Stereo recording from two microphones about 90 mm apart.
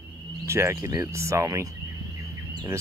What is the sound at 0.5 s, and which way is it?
Speech, 30° right (ahead or behind).